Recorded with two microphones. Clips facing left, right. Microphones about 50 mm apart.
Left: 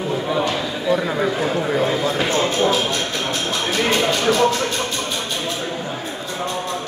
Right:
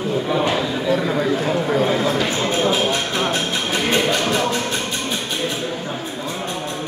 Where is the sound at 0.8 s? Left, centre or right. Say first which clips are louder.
Left 1 dB; centre.